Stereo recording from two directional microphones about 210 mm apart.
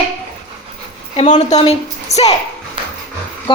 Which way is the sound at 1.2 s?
35° left (ahead or behind).